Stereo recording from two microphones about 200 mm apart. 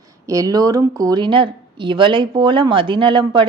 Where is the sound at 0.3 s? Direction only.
15° right (ahead or behind).